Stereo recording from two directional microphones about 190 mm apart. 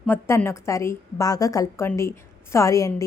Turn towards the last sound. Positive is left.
turn(degrees=15)  # may be behind; listen again after turning